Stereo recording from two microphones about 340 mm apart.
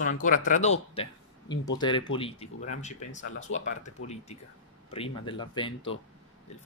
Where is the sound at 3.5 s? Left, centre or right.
Left.